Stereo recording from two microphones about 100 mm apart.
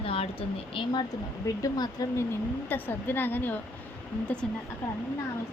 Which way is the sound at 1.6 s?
40° left (ahead or behind).